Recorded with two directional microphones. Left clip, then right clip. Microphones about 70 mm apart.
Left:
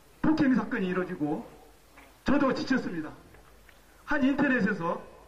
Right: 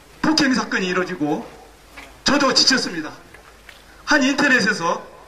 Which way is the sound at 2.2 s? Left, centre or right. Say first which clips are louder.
Right 11 dB; centre.